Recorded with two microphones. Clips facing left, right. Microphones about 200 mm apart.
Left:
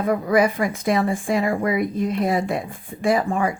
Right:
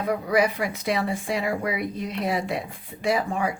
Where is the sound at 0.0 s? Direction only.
50° left (ahead or behind).